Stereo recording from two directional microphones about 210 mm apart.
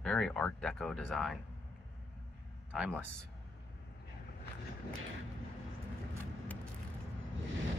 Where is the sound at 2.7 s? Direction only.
5° right (ahead or behind).